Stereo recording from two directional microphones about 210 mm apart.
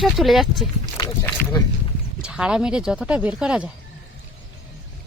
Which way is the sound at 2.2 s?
5° right (ahead or behind).